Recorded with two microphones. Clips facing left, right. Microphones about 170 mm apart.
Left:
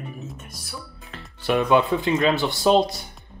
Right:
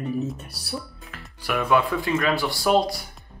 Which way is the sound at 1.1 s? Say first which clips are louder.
Left 5 dB; 25° left (ahead or behind).